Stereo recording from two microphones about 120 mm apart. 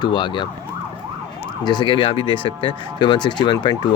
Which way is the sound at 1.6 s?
40° left (ahead or behind).